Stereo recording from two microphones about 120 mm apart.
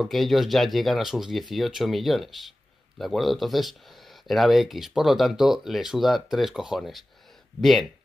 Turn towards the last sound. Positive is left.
turn(degrees=0)  # may be behind; listen again after turning